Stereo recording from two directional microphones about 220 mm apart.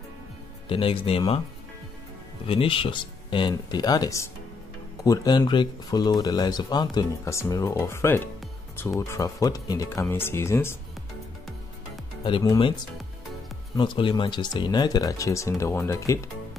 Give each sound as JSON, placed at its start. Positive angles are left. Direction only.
{"t": 0.7, "sound": "speech", "side_deg": 25}
{"t": 2.4, "sound": "speech", "side_deg": 25}
{"t": 12.2, "sound": "speech", "side_deg": 25}
{"t": 13.7, "sound": "speech", "side_deg": 20}